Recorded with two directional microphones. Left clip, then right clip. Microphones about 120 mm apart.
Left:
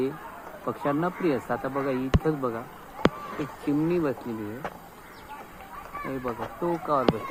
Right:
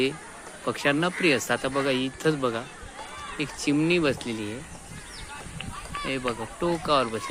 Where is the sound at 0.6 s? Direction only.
60° right (ahead or behind).